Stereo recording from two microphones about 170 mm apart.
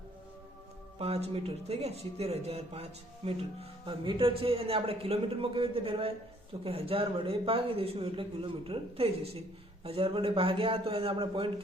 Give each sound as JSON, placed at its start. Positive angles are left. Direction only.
{"t": 0.9, "sound": "speech", "side_deg": -35}